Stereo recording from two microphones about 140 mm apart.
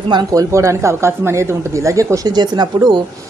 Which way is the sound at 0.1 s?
25° right (ahead or behind).